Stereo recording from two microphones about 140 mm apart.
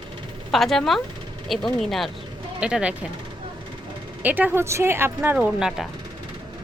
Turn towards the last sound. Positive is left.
turn(degrees=-5)  # may be behind; listen again after turning